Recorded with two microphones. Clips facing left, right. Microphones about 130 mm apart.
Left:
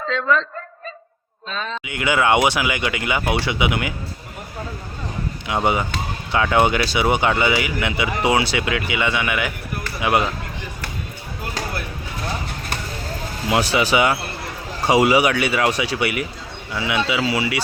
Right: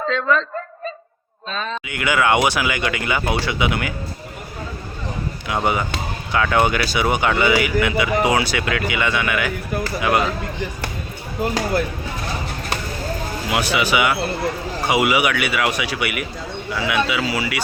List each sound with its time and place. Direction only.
1.9 s a man's voice: 25° left (ahead or behind)
5.5 s a man's voice: 20° left (ahead or behind)
13.5 s a man's voice: 30° left (ahead or behind)